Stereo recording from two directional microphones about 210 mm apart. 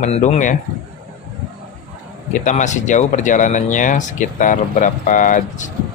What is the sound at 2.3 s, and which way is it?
Speech, 35° left (ahead or behind).